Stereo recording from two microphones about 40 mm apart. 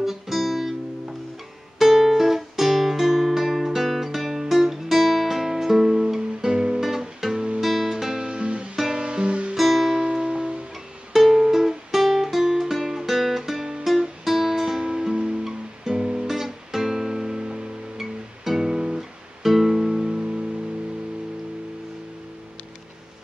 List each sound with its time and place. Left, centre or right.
0.0 s guitar: centre
1.8 s guitar: centre
6.8 s music: centre
7.3 s music: right
7.6 s music: centre; by 8.6 s right
8.7 s music: centre
9.0 s music: right
9.6 s music: centre
10.0 s music: right